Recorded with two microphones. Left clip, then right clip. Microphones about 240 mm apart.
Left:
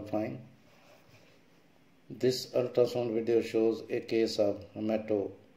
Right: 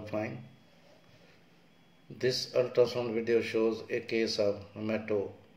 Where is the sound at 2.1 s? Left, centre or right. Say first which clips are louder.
Even; left.